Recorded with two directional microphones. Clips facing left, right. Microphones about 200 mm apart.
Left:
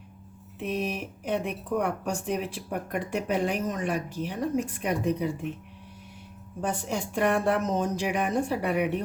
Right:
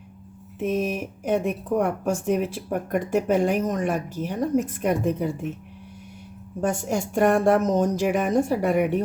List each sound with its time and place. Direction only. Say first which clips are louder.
0.6 s speech: right 6 dB; 45° right (ahead or behind)
6.6 s speech: right 5 dB; 45° right (ahead or behind)